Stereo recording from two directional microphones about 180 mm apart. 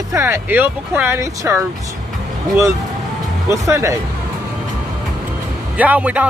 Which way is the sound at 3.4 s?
15° right (ahead or behind).